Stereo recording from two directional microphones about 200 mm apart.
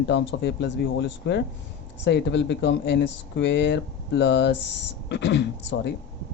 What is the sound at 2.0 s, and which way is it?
Speech, 60° left (ahead or behind).